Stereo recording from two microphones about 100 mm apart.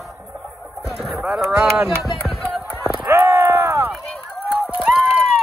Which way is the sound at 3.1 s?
30° right (ahead or behind).